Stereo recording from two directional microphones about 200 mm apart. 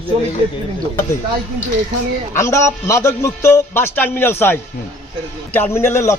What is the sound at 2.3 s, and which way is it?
A man's voice, 15° left (ahead or behind).